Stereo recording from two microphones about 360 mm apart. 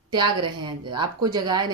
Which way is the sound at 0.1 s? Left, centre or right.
Centre.